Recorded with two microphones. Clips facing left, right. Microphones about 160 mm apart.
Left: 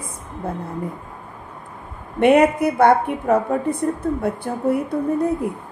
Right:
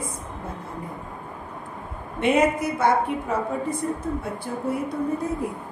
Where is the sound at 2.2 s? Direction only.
60° left (ahead or behind).